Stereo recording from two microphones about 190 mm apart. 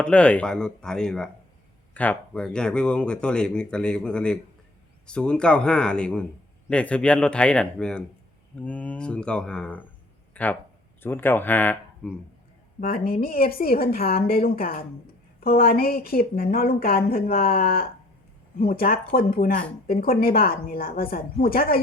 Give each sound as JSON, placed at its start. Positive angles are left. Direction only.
{"t": 0.0, "sound": "speech", "side_deg": 5}
{"t": 13.1, "sound": "speech", "side_deg": 50}